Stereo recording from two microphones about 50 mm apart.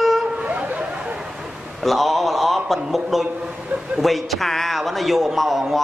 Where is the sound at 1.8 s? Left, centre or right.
Centre.